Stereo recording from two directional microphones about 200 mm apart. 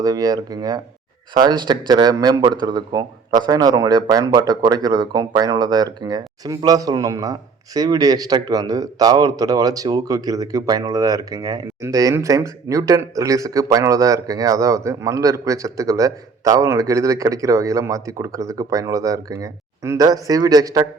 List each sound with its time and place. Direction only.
0.0 s speech: 20° right (ahead or behind)